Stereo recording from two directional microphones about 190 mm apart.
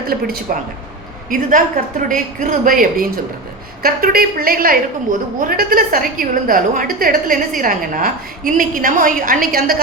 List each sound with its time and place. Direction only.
0.1 s a woman's voice: 50° right (ahead or behind)
1.3 s a woman's voice: 45° right (ahead or behind)